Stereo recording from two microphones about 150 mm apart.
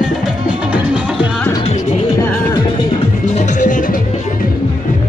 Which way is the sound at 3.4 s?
55° left (ahead or behind).